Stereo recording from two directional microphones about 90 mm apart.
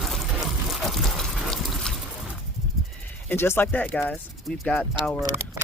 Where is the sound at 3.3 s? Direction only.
25° left (ahead or behind); by 4.8 s 10° left (ahead or behind).